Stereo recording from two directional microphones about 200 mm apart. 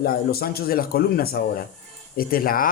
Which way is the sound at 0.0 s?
50° left (ahead or behind).